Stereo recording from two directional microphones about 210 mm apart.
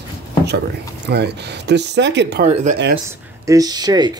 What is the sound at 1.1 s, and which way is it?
Speech, 55° right (ahead or behind).